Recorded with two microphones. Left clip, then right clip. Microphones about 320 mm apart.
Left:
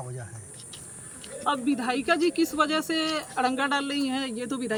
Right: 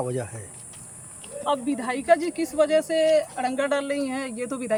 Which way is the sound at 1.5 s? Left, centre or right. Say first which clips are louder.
Right 1 dB; centre.